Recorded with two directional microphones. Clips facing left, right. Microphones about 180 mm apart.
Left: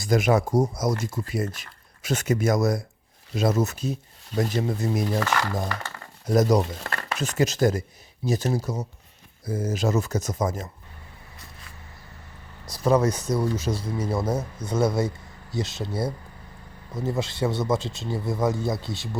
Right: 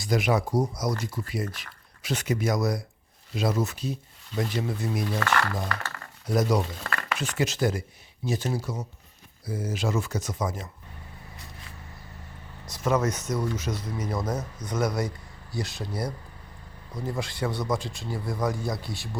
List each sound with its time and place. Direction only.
0.0 s speech: 45° left (ahead or behind)
5.0 s speech: 15° left (ahead or behind)
6.2 s speech: 45° left (ahead or behind)
12.7 s speech: 35° left (ahead or behind)